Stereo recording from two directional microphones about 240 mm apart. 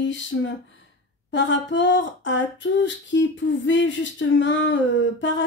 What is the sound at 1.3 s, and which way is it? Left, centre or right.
Female singing, left.